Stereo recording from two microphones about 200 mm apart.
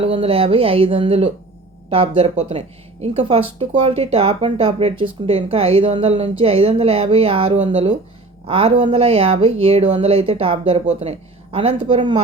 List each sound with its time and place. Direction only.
0.0 s speech: 30° right (ahead or behind)